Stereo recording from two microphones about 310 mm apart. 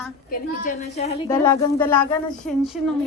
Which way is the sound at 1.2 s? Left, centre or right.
Centre.